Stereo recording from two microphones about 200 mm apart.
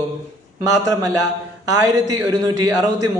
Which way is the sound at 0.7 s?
15° right (ahead or behind).